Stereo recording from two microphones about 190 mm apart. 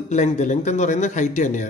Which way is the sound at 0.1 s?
40° left (ahead or behind).